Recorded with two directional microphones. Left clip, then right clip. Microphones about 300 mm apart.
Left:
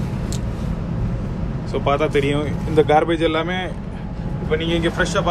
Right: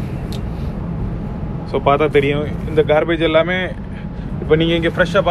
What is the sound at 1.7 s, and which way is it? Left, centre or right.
Speech, centre.